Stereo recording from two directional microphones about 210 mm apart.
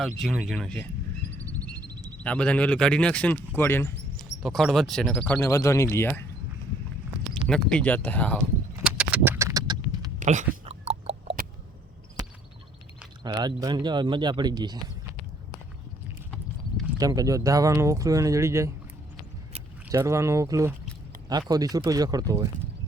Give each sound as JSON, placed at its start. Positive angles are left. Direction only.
{"t": 0.2, "sound": "speech", "side_deg": 0}
{"t": 2.0, "sound": "speech", "side_deg": 5}
{"t": 7.4, "sound": "speech", "side_deg": 5}
{"t": 8.8, "sound": "a sound", "side_deg": -5}
{"t": 10.2, "sound": "a sound", "side_deg": -35}
{"t": 13.2, "sound": "speech", "side_deg": -20}
{"t": 16.3, "sound": "clip-clop", "side_deg": 0}
{"t": 17.0, "sound": "speech", "side_deg": -15}
{"t": 19.9, "sound": "speech", "side_deg": -15}